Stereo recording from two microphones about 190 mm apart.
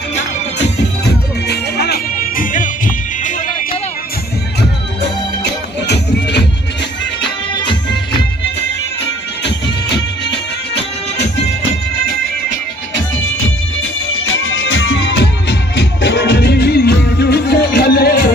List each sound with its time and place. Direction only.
0.6 s music: 60° left (ahead or behind)
2.5 s music: 45° left (ahead or behind)
9.4 s music: 65° left (ahead or behind)
14.1 s music: 90° left; by 18.3 s 55° left (ahead or behind)